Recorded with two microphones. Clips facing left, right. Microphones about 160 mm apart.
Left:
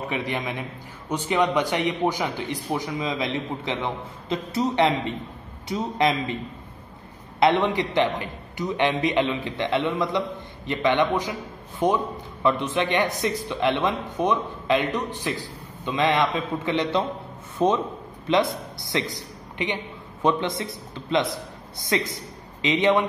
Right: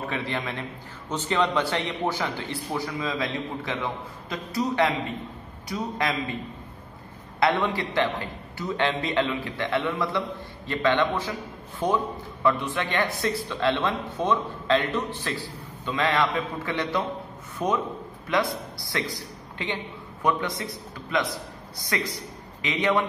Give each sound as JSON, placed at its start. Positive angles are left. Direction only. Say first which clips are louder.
{"t": 0.0, "sound": "a man's voice", "louder": "left 2 dB", "side_deg": 15}
{"t": 7.3, "sound": "a man's voice", "louder": "left 4 dB", "side_deg": 20}